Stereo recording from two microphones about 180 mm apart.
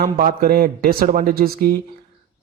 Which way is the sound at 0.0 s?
55° right (ahead or behind).